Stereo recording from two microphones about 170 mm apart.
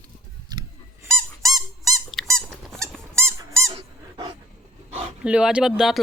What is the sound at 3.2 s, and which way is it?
Squeak, 15° right (ahead or behind).